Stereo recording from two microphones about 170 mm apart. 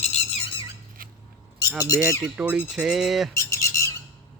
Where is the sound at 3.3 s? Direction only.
15° left (ahead or behind).